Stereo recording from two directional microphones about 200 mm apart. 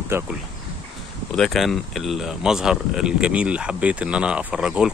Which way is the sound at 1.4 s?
Centre (ahead or behind).